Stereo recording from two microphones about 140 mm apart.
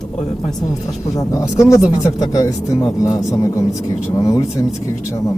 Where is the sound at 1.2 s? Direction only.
25° left (ahead or behind).